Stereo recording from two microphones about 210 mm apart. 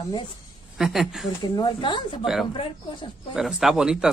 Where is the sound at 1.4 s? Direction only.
20° left (ahead or behind).